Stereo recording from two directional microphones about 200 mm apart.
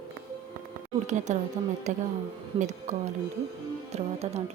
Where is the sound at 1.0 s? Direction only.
35° right (ahead or behind).